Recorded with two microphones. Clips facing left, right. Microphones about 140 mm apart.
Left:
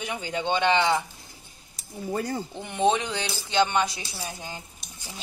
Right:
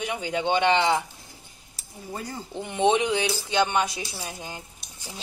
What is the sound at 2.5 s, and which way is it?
Speech, 10° right (ahead or behind).